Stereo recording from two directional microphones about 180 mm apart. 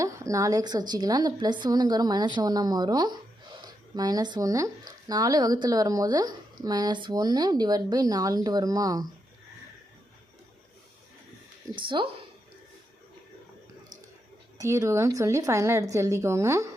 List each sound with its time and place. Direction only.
0.0 s speech: 15° right (ahead or behind)
11.7 s speech: 25° right (ahead or behind)
14.6 s a woman's voice: 15° right (ahead or behind)